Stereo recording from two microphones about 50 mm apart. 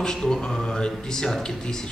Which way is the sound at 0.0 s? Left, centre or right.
Centre.